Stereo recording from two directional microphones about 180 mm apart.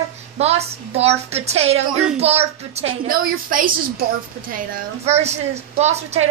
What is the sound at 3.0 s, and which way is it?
Speech, 50° right (ahead or behind).